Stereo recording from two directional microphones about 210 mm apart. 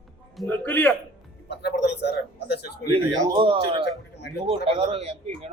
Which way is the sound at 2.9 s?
25° right (ahead or behind).